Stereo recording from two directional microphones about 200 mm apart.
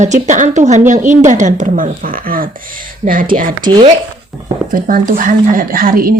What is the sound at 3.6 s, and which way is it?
Speech, 20° right (ahead or behind).